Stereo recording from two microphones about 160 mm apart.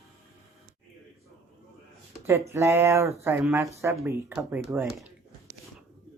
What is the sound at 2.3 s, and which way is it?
Speech, 15° right (ahead or behind).